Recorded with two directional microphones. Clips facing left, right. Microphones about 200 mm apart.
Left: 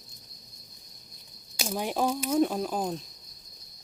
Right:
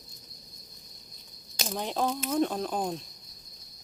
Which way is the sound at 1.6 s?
10° left (ahead or behind).